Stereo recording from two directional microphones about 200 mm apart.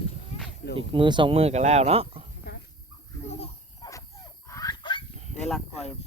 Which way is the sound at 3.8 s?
15° left (ahead or behind).